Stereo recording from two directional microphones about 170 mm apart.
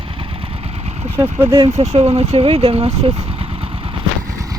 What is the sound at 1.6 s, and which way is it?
Speech, 40° right (ahead or behind).